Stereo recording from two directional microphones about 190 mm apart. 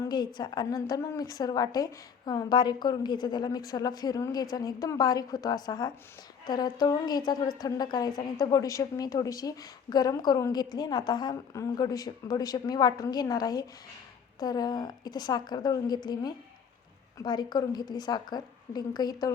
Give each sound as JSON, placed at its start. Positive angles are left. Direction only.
{"t": 0.0, "sound": "a woman's voice", "side_deg": 20}